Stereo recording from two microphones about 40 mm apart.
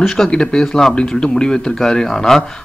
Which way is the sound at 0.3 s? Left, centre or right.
Centre.